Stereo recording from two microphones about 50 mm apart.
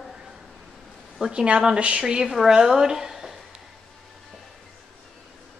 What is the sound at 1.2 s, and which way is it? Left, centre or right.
A woman's voice, centre.